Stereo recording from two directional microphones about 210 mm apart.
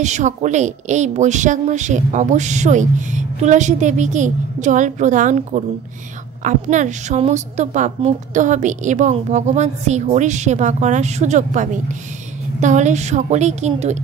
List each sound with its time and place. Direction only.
0.0 s a woman's voice: 35° right (ahead or behind)